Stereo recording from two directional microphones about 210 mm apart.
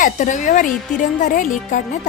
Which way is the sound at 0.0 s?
35° left (ahead or behind).